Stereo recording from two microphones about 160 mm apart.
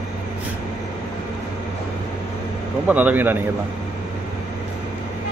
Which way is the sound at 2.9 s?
10° right (ahead or behind).